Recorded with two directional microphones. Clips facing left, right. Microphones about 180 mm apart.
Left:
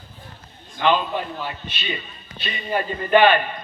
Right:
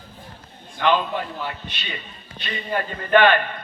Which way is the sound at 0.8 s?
15° left (ahead or behind).